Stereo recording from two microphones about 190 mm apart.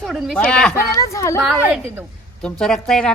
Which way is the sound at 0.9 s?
15° left (ahead or behind).